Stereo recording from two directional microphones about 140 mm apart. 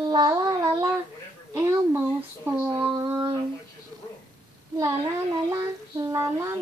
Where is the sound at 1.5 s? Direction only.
15° right (ahead or behind).